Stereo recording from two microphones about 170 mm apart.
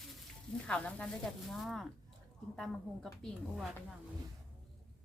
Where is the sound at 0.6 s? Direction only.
5° left (ahead or behind).